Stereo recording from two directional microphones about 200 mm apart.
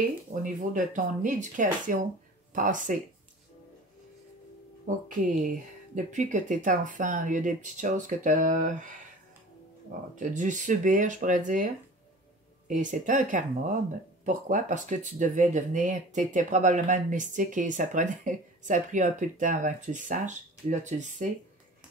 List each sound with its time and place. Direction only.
0.3 s speech: 40° right (ahead or behind)
4.8 s speech: 40° right (ahead or behind)
10.1 s speech: 40° right (ahead or behind)